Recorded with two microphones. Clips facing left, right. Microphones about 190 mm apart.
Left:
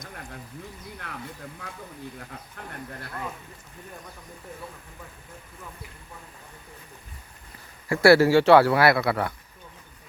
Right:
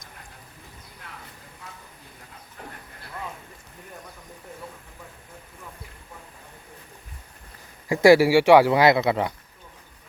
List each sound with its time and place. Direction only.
7.9 s speech: 15° right (ahead or behind)